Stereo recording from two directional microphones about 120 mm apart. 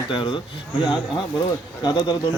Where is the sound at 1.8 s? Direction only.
35° left (ahead or behind).